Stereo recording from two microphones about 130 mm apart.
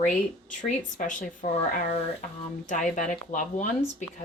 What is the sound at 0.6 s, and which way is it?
Speech, 75° left (ahead or behind).